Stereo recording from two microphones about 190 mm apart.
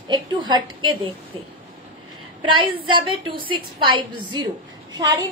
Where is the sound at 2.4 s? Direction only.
25° right (ahead or behind).